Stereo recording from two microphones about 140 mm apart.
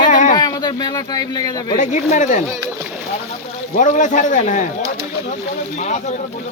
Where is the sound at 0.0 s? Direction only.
65° left (ahead or behind).